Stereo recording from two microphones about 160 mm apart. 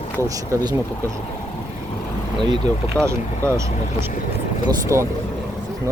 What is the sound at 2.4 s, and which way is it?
Speech, 25° right (ahead or behind).